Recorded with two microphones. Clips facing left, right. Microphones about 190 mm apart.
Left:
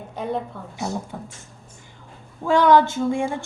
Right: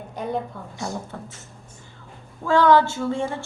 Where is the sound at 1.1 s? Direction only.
10° left (ahead or behind).